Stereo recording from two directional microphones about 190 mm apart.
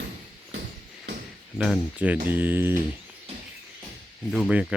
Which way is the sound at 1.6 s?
5° right (ahead or behind).